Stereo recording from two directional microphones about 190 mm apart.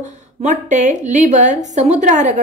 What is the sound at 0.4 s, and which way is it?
A woman's voice, 40° right (ahead or behind).